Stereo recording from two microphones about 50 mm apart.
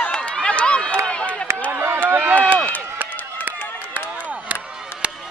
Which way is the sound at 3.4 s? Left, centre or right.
Right.